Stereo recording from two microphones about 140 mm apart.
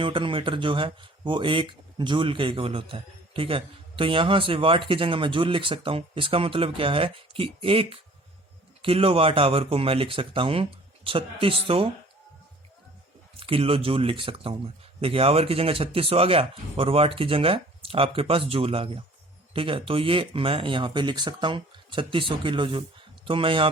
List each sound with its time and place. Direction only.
0.0 s speech: 35° right (ahead or behind)
13.4 s speech: 40° right (ahead or behind)